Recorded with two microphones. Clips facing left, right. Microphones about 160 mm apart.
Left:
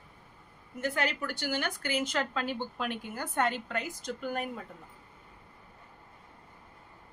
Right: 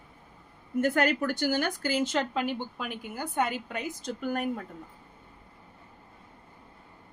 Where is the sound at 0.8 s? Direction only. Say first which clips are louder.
Right 6 dB; 50° right (ahead or behind); by 2.5 s 20° right (ahead or behind).